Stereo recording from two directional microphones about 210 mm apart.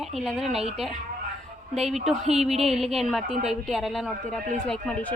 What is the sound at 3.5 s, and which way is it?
A woman's voice, centre (ahead or behind).